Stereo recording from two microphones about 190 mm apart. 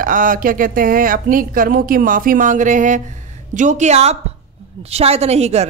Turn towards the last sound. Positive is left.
turn(degrees=-35)  # may be behind; listen again after turning